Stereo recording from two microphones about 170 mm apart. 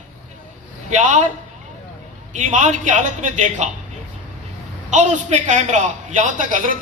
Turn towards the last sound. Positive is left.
turn(degrees=-50)  # may be behind; listen again after turning